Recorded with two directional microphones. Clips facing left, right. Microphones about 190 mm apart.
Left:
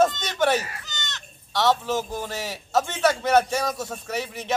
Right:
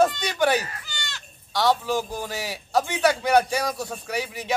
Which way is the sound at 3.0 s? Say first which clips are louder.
Even; centre (ahead or behind).